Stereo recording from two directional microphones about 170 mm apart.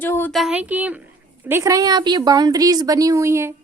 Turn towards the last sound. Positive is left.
turn(degrees=-15)  # may be behind; listen again after turning